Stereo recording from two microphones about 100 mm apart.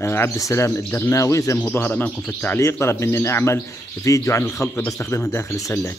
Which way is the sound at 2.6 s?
25° left (ahead or behind).